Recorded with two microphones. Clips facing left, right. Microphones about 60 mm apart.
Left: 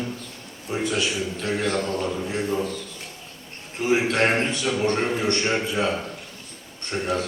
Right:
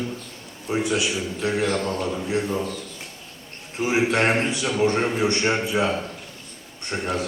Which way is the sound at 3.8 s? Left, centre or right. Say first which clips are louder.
Even; centre.